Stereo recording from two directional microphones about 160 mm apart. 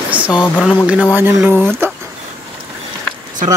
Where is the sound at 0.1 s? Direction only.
5° right (ahead or behind).